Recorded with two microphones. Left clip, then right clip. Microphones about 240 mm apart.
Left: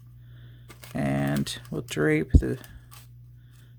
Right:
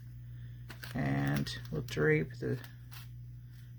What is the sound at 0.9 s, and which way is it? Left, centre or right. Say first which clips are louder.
Speech: left 8 dB; left.